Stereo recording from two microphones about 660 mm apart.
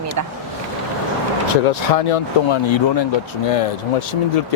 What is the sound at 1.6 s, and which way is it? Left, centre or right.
Speech, left.